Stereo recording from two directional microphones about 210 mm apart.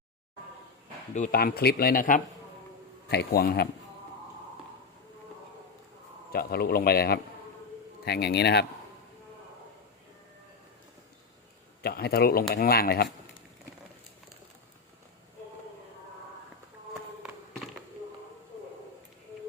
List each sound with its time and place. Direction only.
1.1 s speech: 40° left (ahead or behind)
6.3 s speech: 50° left (ahead or behind)
11.8 s speech: 50° left (ahead or behind)